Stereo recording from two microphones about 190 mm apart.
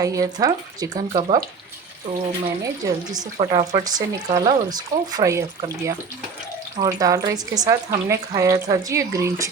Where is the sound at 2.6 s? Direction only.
20° right (ahead or behind).